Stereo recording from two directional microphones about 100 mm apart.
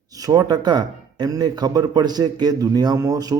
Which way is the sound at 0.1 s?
35° right (ahead or behind).